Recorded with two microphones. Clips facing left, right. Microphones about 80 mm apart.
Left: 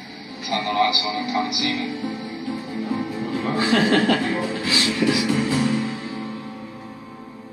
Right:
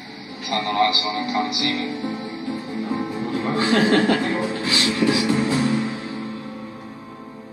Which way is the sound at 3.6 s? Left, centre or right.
Right.